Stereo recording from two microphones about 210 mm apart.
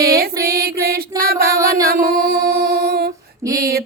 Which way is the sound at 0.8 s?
45° right (ahead or behind).